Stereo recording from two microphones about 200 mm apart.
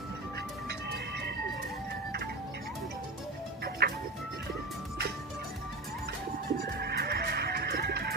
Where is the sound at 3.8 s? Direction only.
55° right (ahead or behind).